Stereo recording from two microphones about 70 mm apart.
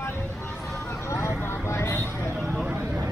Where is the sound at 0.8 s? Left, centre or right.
Left.